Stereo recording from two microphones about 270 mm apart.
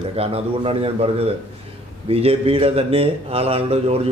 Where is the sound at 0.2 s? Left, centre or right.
Right.